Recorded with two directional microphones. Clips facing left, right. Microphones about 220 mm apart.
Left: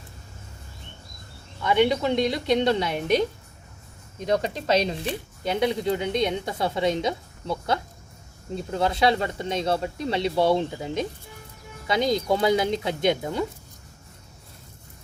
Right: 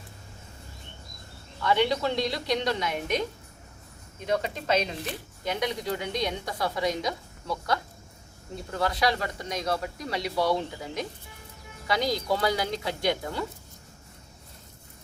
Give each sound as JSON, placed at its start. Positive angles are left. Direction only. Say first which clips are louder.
{"t": 1.6, "sound": "speech", "louder": "left 4 dB", "side_deg": 20}
{"t": 4.3, "sound": "speech", "louder": "left 4 dB", "side_deg": 35}